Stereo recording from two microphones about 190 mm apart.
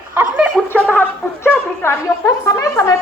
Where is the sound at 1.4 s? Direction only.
10° left (ahead or behind).